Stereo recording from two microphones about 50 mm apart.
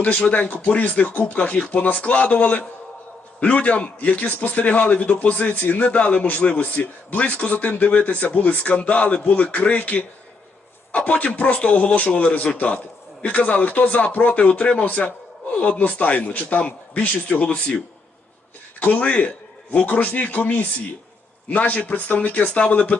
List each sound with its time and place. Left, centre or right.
0.0 s a man's voice: left
18.8 s speech: left
22.4 s a man's voice: centre
22.7 s speech: left